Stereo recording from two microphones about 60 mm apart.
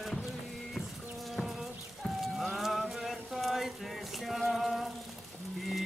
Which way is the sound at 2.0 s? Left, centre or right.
Centre.